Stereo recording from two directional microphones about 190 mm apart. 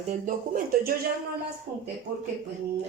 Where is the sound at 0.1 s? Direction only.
45° right (ahead or behind).